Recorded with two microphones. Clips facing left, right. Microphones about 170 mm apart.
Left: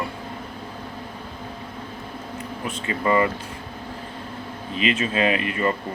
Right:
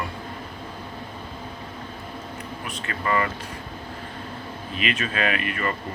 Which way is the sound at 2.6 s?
20° left (ahead or behind).